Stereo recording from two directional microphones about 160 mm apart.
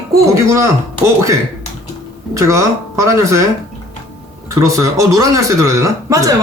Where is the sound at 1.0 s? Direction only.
20° right (ahead or behind).